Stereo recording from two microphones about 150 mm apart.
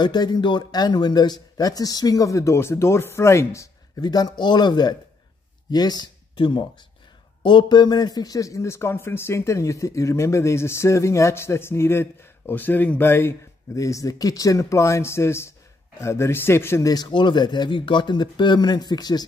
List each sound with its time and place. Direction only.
0.0 s a man's voice: 30° left (ahead or behind)